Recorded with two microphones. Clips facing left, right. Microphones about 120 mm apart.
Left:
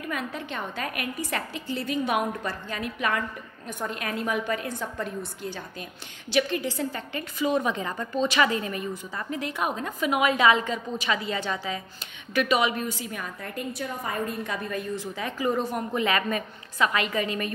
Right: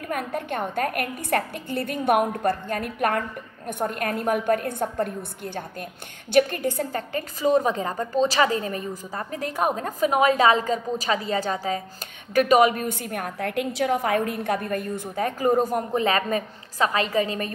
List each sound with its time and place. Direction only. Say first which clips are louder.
0.1 s a woman's voice: right 6 dB; 50° right (ahead or behind); by 17.5 s 35° right (ahead or behind)